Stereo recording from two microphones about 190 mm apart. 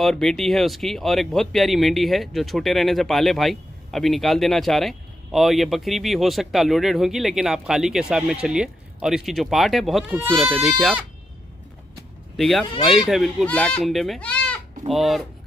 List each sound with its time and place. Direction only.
0.0 s speech: centre (ahead or behind)
12.4 s speech: centre (ahead or behind)